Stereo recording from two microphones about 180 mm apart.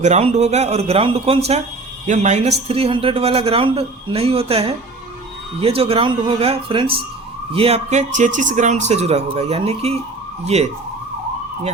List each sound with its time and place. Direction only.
0.0 s a man's voice: 35° right (ahead or behind)